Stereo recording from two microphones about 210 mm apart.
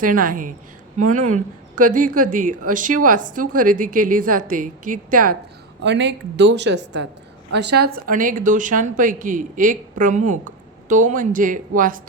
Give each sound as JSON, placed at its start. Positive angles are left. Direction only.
{"t": 0.0, "sound": "speech", "side_deg": -40}
{"t": 5.8, "sound": "speech", "side_deg": -55}